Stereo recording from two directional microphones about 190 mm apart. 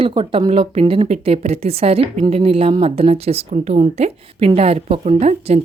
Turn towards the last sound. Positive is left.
turn(degrees=-35)  # may be behind; listen again after turning